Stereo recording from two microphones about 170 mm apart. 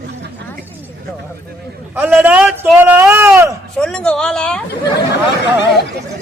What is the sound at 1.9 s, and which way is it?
A man's voice, 10° right (ahead or behind).